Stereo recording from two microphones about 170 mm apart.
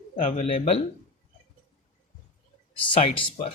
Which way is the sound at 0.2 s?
45° left (ahead or behind).